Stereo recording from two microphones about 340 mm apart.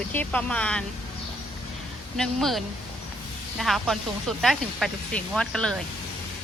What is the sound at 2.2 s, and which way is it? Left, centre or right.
Speech, centre.